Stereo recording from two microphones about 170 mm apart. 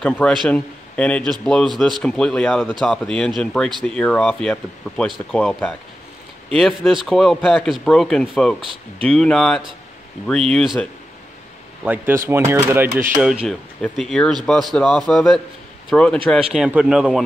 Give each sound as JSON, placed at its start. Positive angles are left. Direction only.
{"t": 0.0, "sound": "a man's voice", "side_deg": 5}
{"t": 6.9, "sound": "speech", "side_deg": 0}
{"t": 11.8, "sound": "speech", "side_deg": -10}